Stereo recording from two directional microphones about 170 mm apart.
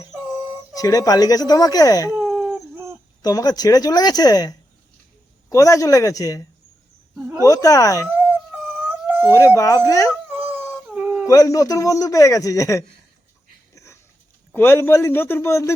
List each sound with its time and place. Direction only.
0.1 s a sound: 10° right (ahead or behind)
0.7 s a man's voice: 20° left (ahead or behind)
2.2 s a sound: centre (ahead or behind)
2.7 s a sound: 15° right (ahead or behind)
3.2 s a man's voice: 20° left (ahead or behind)
7.2 s speech: 10° right (ahead or behind)
7.4 s a man's voice: 20° left (ahead or behind)
8.1 s dog: 10° right (ahead or behind)
9.6 s a man's voice: 20° left (ahead or behind)
10.1 s dog: 10° right (ahead or behind)
11.3 s a man's voice: 20° left (ahead or behind)
13.7 s dog: 15° left (ahead or behind)
14.5 s a man's voice: 15° left (ahead or behind)